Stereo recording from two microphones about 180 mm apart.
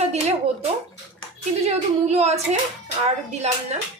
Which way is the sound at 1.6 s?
35° right (ahead or behind).